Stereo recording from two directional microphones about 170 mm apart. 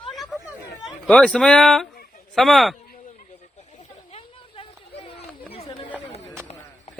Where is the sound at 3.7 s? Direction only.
35° left (ahead or behind).